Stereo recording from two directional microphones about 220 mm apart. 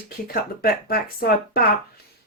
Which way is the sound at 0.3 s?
45° left (ahead or behind).